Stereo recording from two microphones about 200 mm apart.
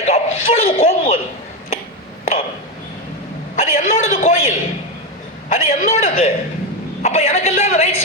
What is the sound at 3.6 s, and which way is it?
Speech, 35° left (ahead or behind).